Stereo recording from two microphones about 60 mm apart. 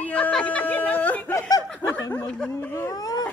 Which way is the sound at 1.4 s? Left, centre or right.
Left.